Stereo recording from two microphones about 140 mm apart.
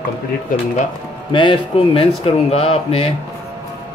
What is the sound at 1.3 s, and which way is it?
Speech, 35° left (ahead or behind).